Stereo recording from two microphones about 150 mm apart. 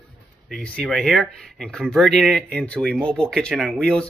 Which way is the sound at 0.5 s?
5° left (ahead or behind).